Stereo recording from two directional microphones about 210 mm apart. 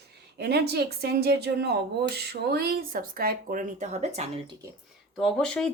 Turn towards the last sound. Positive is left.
turn(degrees=5)  # may be behind; listen again after turning